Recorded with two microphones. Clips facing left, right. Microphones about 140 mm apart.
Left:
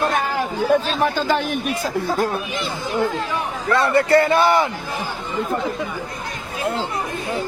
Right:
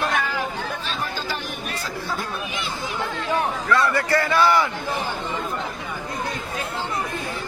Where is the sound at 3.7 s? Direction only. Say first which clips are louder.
Left 6 dB; 25° left (ahead or behind).